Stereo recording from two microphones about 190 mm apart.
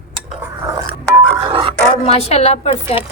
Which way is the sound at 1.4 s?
25° right (ahead or behind).